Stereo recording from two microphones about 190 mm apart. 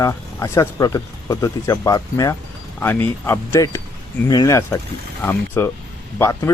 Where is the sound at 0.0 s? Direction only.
15° left (ahead or behind).